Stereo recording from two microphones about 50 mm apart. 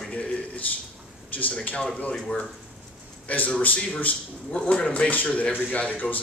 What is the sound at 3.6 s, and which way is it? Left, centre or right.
Speech, left.